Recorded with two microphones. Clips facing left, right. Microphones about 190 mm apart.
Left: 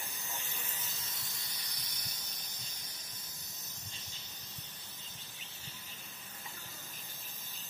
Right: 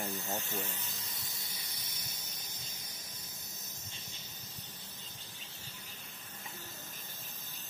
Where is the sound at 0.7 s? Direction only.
Centre (ahead or behind).